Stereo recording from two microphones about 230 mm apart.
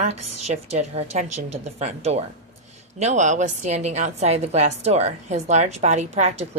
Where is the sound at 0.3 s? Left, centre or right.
Right.